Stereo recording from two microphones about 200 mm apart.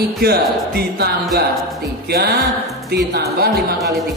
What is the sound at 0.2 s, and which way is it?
Speech, 50° right (ahead or behind).